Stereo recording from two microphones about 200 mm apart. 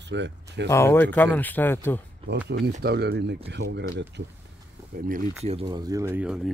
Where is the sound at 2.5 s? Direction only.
60° right (ahead or behind).